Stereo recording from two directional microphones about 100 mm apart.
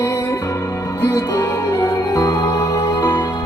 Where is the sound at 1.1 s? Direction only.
30° left (ahead or behind).